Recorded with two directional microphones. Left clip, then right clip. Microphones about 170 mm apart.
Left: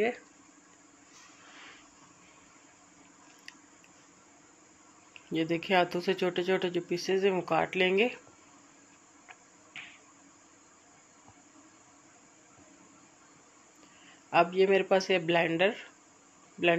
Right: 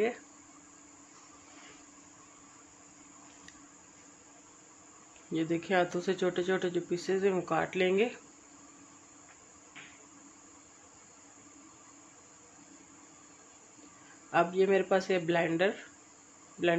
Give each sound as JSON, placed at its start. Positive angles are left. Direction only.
{"t": 5.3, "sound": "speech", "side_deg": 15}
{"t": 14.3, "sound": "speech", "side_deg": 15}